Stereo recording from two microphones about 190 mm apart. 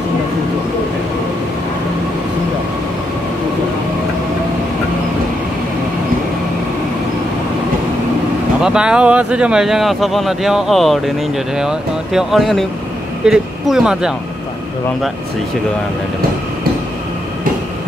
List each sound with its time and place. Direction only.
8.6 s speech: 5° right (ahead or behind)